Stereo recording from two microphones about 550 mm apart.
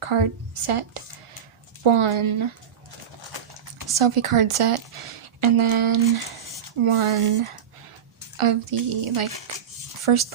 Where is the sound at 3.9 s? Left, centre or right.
Right.